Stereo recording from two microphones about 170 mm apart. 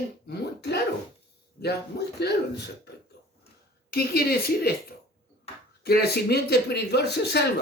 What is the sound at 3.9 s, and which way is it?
Speech, 65° left (ahead or behind).